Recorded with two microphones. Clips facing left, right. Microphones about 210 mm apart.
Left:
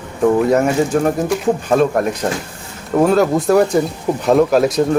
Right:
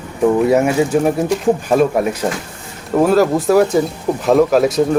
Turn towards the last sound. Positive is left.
turn(degrees=0)  # may be behind; listen again after turning